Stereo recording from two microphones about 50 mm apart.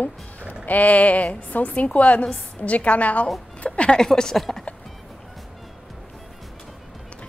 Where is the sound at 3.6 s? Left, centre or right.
Left.